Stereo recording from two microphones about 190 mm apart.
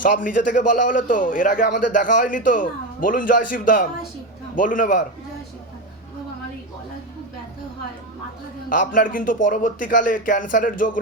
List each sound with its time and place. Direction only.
0.0 s a man's voice: 45° left (ahead or behind)
8.7 s a man's voice: 45° left (ahead or behind)